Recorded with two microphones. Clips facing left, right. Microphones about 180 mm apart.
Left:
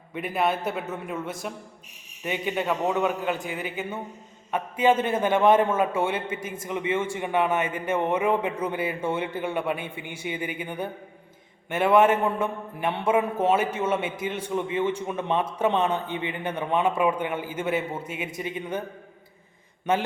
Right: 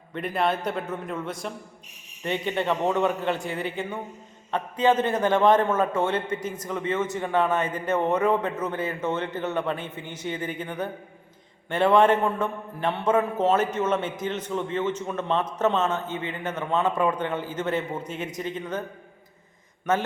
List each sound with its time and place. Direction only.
0.1 s a man's voice: 5° left (ahead or behind)